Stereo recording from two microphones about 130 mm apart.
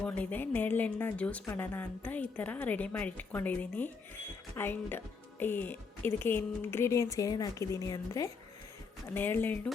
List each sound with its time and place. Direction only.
0.0 s a woman's voice: 10° left (ahead or behind)